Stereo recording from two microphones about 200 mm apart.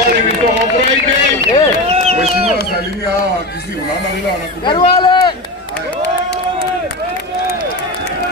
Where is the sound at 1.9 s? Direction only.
30° right (ahead or behind).